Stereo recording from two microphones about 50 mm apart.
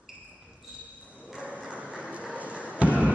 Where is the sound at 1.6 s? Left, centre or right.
Right.